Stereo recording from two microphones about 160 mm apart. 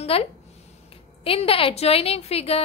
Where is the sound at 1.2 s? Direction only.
35° left (ahead or behind).